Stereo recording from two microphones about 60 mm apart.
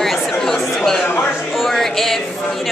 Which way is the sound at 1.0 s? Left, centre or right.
Left.